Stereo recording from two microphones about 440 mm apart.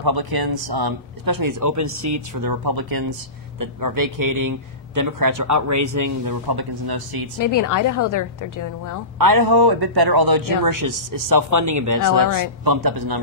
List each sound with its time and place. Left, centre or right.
0.0 s speech: right
7.3 s a woman's voice: left
9.2 s speech: right